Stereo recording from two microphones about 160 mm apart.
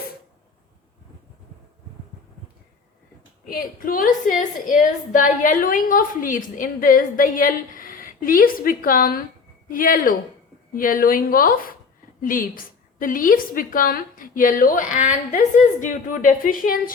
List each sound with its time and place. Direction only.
3.4 s a woman's voice: 65° left (ahead or behind)